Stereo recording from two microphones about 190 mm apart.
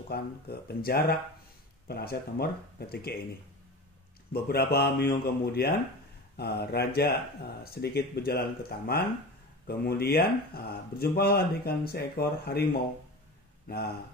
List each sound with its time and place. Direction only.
0.1 s speech: 55° left (ahead or behind)
4.3 s speech: 55° left (ahead or behind)